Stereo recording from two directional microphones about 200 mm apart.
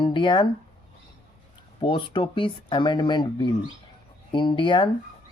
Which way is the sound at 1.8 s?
25° left (ahead or behind).